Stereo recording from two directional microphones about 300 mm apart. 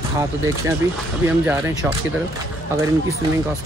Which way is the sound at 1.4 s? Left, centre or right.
Centre.